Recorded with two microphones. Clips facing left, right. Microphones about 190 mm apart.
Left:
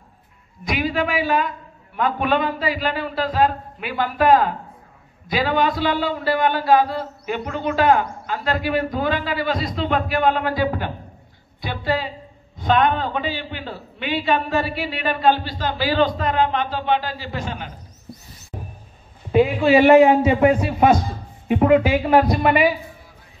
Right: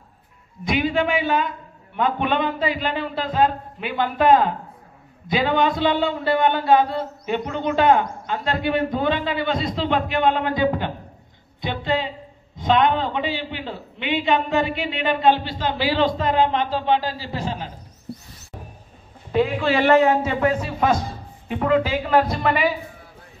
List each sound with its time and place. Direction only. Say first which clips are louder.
0.7 s a man's voice: right 1 dB; 25° right (ahead or behind)
19.3 s a man's voice: left 5 dB; 10° left (ahead or behind)